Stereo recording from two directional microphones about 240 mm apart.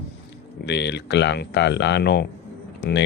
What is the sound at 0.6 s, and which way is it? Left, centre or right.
Speech, left.